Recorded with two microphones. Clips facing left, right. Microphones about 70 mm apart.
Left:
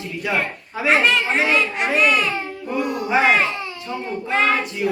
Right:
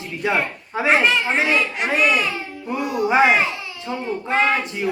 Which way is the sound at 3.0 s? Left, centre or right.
Centre.